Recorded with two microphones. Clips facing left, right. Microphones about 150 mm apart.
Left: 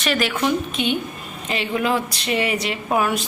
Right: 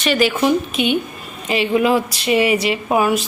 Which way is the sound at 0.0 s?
Centre (ahead or behind).